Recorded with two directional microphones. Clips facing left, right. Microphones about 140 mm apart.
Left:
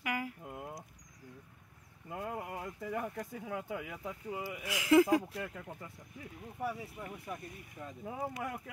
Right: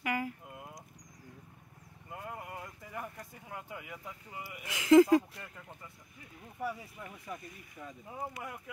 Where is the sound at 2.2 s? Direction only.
80° left.